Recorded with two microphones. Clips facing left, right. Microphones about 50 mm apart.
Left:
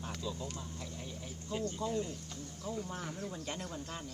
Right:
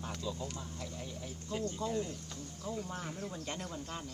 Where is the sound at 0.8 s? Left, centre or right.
Centre.